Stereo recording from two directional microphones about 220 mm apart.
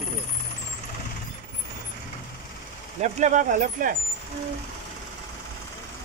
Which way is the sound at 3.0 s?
35° right (ahead or behind).